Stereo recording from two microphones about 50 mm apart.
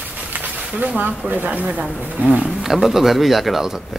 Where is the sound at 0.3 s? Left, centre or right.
Right.